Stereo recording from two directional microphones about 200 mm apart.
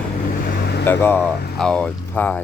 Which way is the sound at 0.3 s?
45° left (ahead or behind).